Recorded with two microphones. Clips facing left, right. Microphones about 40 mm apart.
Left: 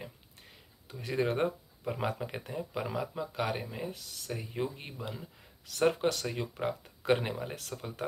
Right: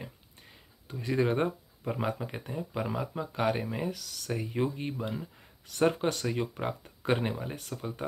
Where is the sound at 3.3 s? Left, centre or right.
Right.